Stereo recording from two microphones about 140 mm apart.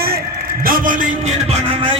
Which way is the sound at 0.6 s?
85° right.